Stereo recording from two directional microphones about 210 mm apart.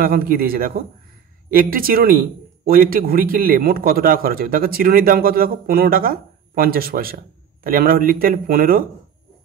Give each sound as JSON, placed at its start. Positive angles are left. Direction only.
{"t": 0.0, "sound": "speech", "side_deg": -45}